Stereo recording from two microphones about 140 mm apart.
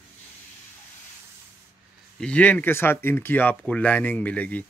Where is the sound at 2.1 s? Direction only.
10° left (ahead or behind).